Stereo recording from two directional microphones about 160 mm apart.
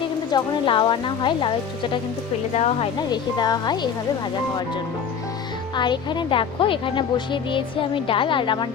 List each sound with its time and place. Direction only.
0.3 s a woman's voice: 30° left (ahead or behind)
3.1 s a woman's voice: 25° left (ahead or behind)
5.7 s a woman's voice: 30° left (ahead or behind)